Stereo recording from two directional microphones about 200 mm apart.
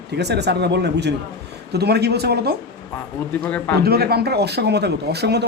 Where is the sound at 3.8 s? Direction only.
50° right (ahead or behind).